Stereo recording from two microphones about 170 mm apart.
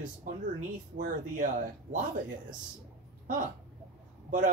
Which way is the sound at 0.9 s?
50° right (ahead or behind).